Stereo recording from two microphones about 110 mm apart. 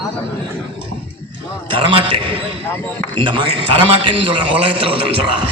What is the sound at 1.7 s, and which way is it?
Speech, 55° right (ahead or behind).